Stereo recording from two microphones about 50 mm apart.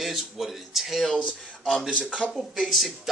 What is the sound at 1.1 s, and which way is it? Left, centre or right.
Speech, left.